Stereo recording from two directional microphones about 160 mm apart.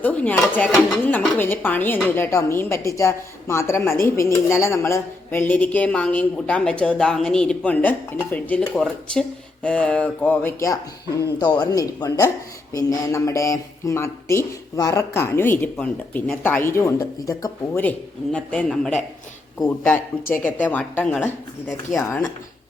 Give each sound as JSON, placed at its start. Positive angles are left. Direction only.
{"t": 0.0, "sound": "a man's voice", "side_deg": 10}
{"t": 17.8, "sound": "a man's voice", "side_deg": 5}
{"t": 20.4, "sound": "a man's voice", "side_deg": 10}
{"t": 21.9, "sound": "speech", "side_deg": 55}